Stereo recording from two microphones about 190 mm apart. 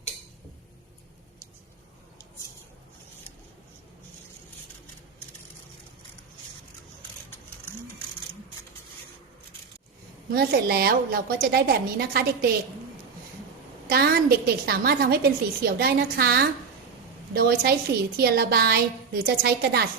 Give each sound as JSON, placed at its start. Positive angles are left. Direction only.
{"t": 10.3, "sound": "a woman's voice", "side_deg": -55}
{"t": 13.8, "sound": "a woman's voice", "side_deg": -55}